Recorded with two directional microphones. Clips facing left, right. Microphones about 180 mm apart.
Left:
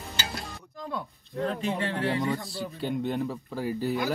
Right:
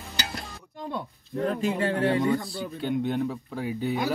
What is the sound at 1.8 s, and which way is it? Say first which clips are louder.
Speech: right 6 dB; 35° right (ahead or behind).